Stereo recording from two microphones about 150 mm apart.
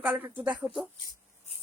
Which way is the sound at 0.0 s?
10° right (ahead or behind).